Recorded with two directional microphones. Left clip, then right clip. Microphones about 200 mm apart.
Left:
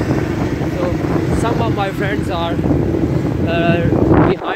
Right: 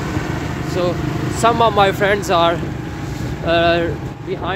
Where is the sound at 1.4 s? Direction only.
30° right (ahead or behind).